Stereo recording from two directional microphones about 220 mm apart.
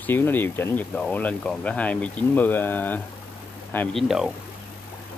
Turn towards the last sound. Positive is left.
turn(degrees=0)  # may be behind; listen again after turning